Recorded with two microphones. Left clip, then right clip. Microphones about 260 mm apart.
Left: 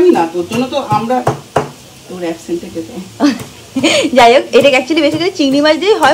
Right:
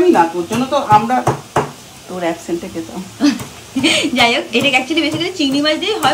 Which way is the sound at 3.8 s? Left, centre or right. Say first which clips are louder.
Left 5 dB; centre.